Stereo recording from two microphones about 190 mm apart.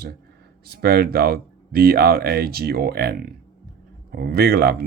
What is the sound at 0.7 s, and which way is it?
Speech, 55° right (ahead or behind).